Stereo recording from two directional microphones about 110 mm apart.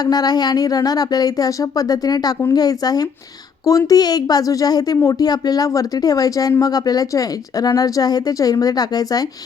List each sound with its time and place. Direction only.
0.0 s speech: 40° left (ahead or behind)